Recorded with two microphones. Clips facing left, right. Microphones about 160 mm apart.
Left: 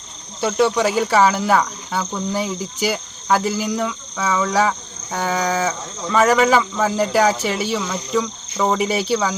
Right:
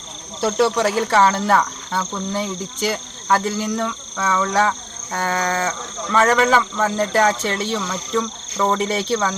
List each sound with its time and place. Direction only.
0.4 s cricket: centre (ahead or behind)
5.1 s speech: 5° left (ahead or behind)